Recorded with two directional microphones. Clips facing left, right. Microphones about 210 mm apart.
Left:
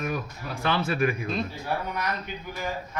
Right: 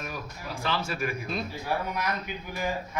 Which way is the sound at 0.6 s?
60° left (ahead or behind).